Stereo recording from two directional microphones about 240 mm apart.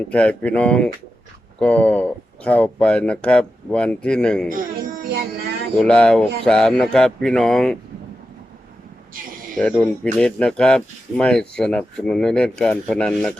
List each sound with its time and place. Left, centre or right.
0.1 s speech: centre
4.4 s child singing: right
5.8 s speech: centre
9.6 s speech: centre